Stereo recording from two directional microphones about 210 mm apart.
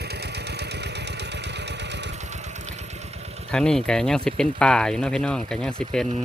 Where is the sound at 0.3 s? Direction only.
55° right (ahead or behind).